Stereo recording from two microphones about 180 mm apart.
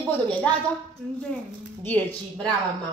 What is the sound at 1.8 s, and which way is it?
Speech, 10° left (ahead or behind).